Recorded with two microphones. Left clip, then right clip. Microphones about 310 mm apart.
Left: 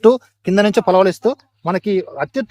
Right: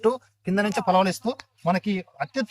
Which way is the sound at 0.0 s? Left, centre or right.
Left.